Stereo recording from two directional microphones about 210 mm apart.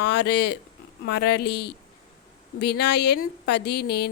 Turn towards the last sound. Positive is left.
turn(degrees=50)  # may be behind; listen again after turning